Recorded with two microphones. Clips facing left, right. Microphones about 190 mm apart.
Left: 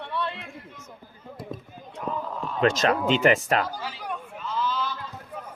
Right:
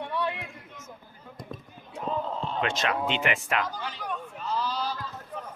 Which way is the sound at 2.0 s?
25° right (ahead or behind).